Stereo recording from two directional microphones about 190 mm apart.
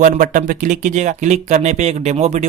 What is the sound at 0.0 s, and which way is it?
Speech, 45° right (ahead or behind).